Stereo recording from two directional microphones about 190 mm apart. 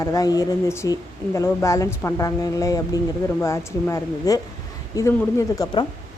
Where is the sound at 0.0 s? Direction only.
20° left (ahead or behind).